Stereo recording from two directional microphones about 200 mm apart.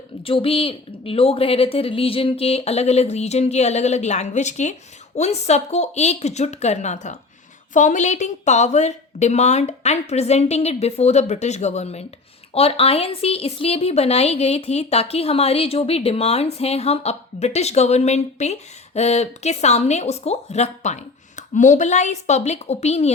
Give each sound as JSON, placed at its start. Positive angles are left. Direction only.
{"t": 0.2, "sound": "a woman's voice", "side_deg": 25}